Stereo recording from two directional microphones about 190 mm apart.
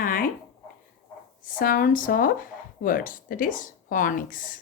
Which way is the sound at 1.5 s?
45° left (ahead or behind).